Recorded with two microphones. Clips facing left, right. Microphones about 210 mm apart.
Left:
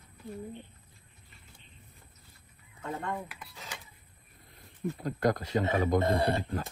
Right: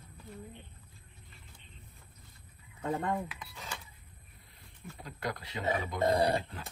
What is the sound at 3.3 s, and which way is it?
Speech, centre (ahead or behind).